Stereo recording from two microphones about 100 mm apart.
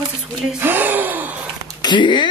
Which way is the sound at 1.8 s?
50° left (ahead or behind).